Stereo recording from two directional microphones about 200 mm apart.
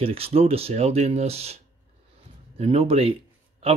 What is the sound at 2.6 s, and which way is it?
Speech, 30° right (ahead or behind).